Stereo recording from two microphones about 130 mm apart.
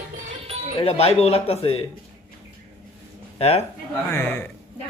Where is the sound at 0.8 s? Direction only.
55° left (ahead or behind).